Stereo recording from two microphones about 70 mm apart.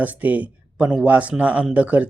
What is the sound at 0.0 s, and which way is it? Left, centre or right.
A man's voice, right.